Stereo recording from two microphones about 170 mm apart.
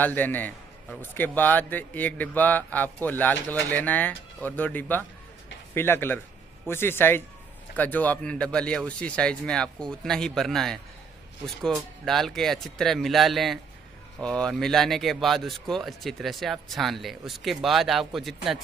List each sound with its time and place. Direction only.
0.0 s a man's voice: 10° left (ahead or behind)
12.0 s speech: centre (ahead or behind)